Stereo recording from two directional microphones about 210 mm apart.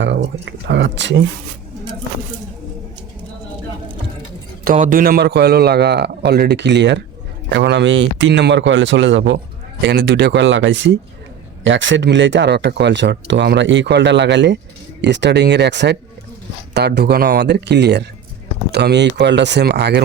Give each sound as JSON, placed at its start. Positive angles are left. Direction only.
{"t": 0.0, "sound": "speech", "side_deg": -60}
{"t": 4.6, "sound": "a man's voice", "side_deg": -40}